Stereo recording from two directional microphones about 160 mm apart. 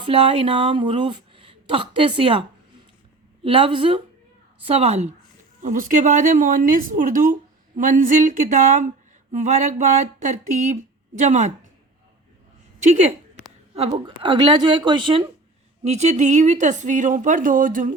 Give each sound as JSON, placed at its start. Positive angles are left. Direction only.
{"t": 0.0, "sound": "speech", "side_deg": -35}
{"t": 3.4, "sound": "speech", "side_deg": -35}
{"t": 5.6, "sound": "speech", "side_deg": -50}
{"t": 13.7, "sound": "speech", "side_deg": -40}
{"t": 14.2, "sound": "a woman's voice", "side_deg": -30}
{"t": 15.8, "sound": "speech", "side_deg": -45}